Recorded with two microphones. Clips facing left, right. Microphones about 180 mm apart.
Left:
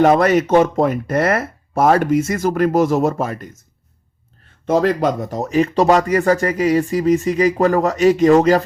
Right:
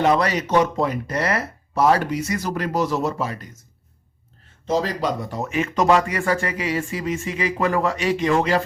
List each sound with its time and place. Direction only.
0.0 s speech: 50° left (ahead or behind)
4.6 s speech: 55° left (ahead or behind)